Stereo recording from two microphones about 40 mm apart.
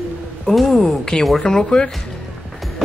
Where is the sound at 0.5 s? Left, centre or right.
Centre.